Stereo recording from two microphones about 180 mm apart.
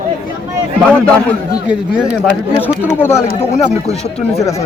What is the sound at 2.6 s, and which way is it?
Speech, 15° left (ahead or behind).